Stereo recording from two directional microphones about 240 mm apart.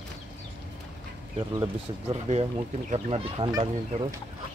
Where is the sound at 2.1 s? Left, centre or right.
Right.